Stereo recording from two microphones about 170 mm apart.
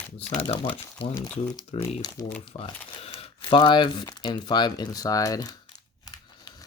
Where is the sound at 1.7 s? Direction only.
30° left (ahead or behind).